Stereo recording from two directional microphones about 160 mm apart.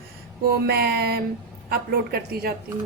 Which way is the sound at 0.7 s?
85° right.